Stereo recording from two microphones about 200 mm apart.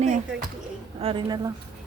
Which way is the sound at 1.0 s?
25° right (ahead or behind).